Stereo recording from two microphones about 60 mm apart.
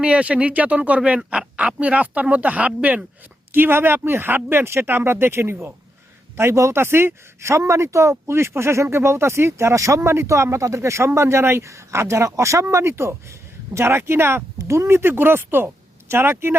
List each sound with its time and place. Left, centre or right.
0.0 s speech: centre
3.5 s speech: right
10.0 s speech: right